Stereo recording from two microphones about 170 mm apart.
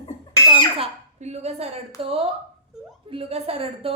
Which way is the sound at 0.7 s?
40° right (ahead or behind).